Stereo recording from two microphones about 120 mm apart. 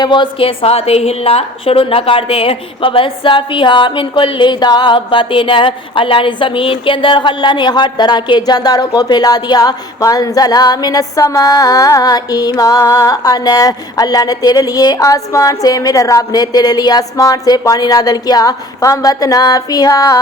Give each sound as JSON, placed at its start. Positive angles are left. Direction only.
{"t": 0.0, "sound": "a woman's voice", "side_deg": 40}
{"t": 11.2, "sound": "music", "side_deg": 25}